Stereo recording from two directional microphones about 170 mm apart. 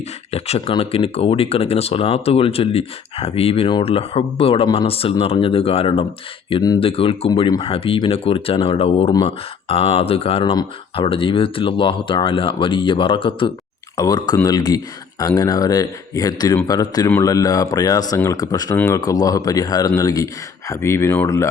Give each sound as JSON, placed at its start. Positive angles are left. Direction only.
{"t": 0.3, "sound": "speech", "side_deg": 35}